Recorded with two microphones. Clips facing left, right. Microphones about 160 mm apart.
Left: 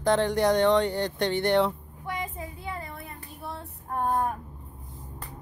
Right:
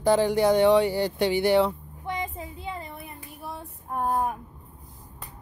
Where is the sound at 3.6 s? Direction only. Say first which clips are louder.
Even; 10° right (ahead or behind).